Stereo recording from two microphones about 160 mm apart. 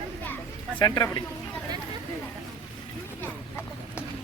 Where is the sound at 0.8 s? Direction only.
25° left (ahead or behind).